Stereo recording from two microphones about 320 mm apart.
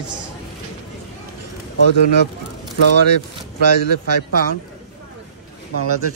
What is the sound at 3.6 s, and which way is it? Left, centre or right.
Speech, right.